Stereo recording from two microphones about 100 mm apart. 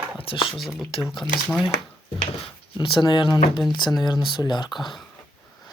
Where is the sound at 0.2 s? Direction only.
65° left (ahead or behind).